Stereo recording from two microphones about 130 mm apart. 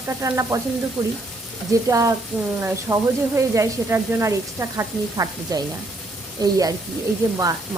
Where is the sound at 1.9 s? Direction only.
25° right (ahead or behind).